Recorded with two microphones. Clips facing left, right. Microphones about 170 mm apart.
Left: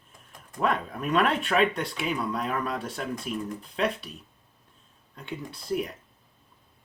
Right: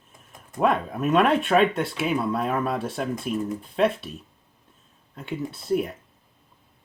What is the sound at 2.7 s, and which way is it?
Throat clearing, 25° right (ahead or behind).